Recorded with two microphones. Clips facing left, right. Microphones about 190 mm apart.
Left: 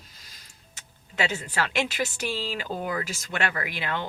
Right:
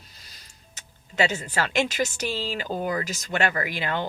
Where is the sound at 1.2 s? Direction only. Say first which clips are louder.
Right 3 dB; 40° right (ahead or behind).